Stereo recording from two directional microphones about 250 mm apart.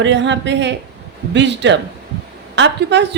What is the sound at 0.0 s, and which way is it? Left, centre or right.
A woman's voice, right.